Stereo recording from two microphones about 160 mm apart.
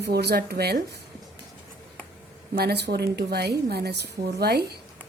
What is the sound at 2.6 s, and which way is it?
A woman's voice, 85° right.